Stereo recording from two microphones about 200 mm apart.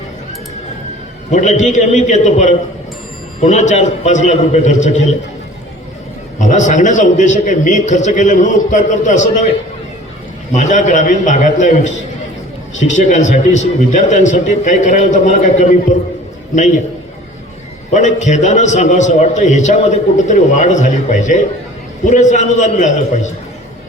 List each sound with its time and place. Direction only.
1.3 s a man's voice: 35° left (ahead or behind)
6.4 s a man's voice: 35° left (ahead or behind)
10.5 s a man's voice: 35° left (ahead or behind)
17.9 s a man's voice: 35° left (ahead or behind)